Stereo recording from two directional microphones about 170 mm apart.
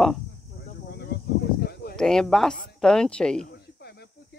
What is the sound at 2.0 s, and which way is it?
Speech, 5° left (ahead or behind).